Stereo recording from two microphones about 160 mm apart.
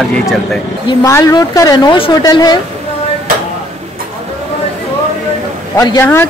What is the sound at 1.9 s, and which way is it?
Speech, 35° left (ahead or behind).